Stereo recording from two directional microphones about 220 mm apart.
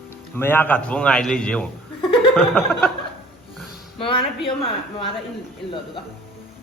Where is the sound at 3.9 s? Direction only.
25° left (ahead or behind).